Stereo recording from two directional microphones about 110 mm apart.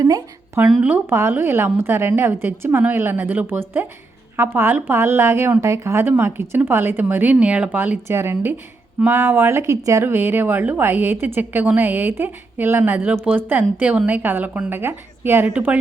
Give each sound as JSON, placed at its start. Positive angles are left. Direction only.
{"t": 0.7, "sound": "a woman's voice", "side_deg": -15}